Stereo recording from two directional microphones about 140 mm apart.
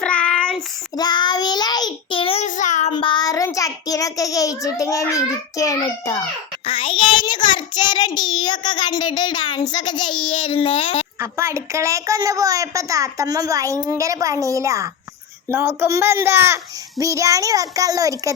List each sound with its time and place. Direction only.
0.0 s child singing: 5° left (ahead or behind)
0.9 s child singing: 30° left (ahead or behind)
2.4 s child singing: 65° left (ahead or behind)
2.9 s child singing: 35° left (ahead or behind)
6.7 s child singing: 40° left (ahead or behind)
11.2 s a woman's voice: 20° right (ahead or behind)